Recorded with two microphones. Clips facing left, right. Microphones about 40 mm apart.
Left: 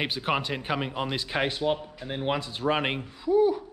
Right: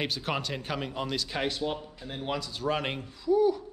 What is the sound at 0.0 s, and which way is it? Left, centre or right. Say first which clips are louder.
A man's voice: left 4 dB; left.